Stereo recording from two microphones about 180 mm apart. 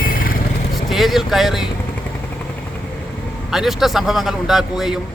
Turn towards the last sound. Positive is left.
turn(degrees=0)  # may be behind; listen again after turning